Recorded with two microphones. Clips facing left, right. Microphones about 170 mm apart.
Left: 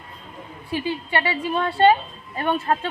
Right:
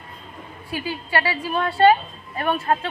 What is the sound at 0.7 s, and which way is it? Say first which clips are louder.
A woman's voice: left 1 dB; 30° left (ahead or behind).